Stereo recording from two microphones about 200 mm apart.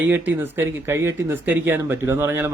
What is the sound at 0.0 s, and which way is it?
Speech, 10° right (ahead or behind).